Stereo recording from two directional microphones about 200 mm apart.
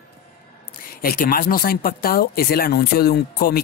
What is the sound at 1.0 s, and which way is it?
Speech, 45° left (ahead or behind).